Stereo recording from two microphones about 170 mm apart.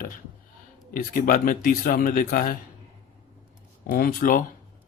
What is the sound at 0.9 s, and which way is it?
Speech, 55° left (ahead or behind).